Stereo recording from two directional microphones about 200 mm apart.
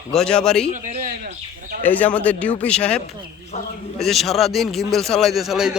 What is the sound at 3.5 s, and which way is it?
Speech, 35° left (ahead or behind).